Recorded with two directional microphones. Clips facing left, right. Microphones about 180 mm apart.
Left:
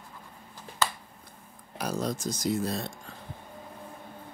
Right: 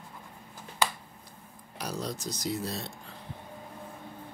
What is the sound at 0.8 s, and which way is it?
Finger snapping, 10° right (ahead or behind).